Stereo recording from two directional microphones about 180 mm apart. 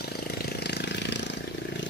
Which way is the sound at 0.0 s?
60° left (ahead or behind).